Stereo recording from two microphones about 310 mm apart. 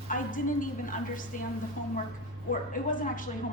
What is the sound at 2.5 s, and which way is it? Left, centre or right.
Speech, left.